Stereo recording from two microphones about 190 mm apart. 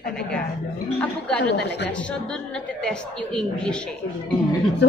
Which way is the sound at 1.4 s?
65° left (ahead or behind).